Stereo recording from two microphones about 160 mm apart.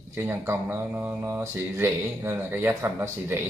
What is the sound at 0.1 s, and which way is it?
Speech, 15° right (ahead or behind).